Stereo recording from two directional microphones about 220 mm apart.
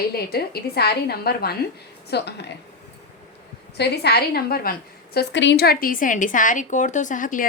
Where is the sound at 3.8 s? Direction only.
45° left (ahead or behind).